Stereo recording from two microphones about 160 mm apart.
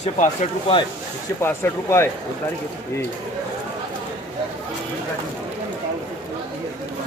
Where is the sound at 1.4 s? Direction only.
15° left (ahead or behind).